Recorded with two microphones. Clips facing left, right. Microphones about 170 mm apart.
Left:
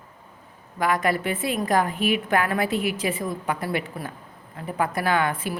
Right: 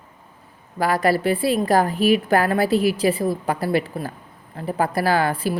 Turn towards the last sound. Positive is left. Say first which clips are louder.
# right 4 dB
turn(degrees=-35)  # may be behind; listen again after turning